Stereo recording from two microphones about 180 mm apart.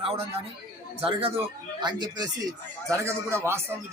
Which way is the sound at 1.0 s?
30° right (ahead or behind).